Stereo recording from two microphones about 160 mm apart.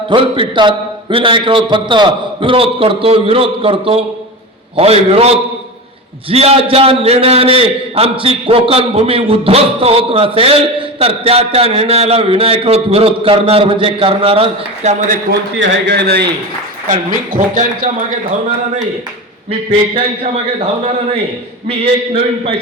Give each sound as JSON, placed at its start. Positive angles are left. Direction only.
{"t": 0.1, "sound": "a man's voice", "side_deg": -30}
{"t": 15.0, "sound": "a man's voice", "side_deg": -60}
{"t": 15.9, "sound": "a man's voice", "side_deg": -90}
{"t": 17.5, "sound": "a man's voice", "side_deg": -55}
{"t": 21.7, "sound": "a man's voice", "side_deg": -40}